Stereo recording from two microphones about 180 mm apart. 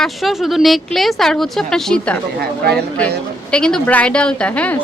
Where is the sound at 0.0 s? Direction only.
Centre (ahead or behind).